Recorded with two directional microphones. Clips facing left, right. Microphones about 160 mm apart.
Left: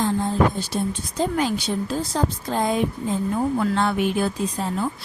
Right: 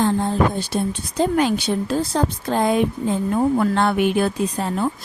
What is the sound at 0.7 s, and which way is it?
Speech, 70° right (ahead or behind).